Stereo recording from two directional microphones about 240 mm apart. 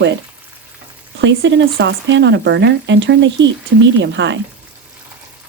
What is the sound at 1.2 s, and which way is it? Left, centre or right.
Speech, right.